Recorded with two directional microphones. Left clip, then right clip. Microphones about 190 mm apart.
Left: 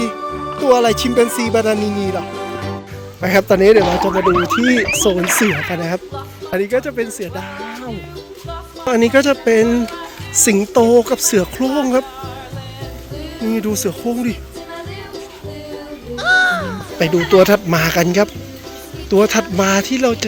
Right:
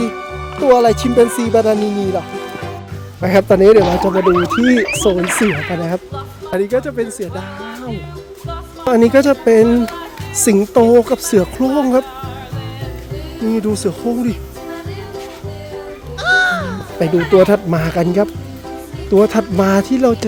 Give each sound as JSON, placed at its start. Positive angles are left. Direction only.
{"t": 0.6, "sound": "speech", "side_deg": 0}
{"t": 8.9, "sound": "speech", "side_deg": -10}
{"t": 13.4, "sound": "speech", "side_deg": 0}
{"t": 16.1, "sound": "music", "side_deg": 0}
{"t": 17.4, "sound": "speech", "side_deg": 0}
{"t": 19.6, "sound": "speech", "side_deg": -20}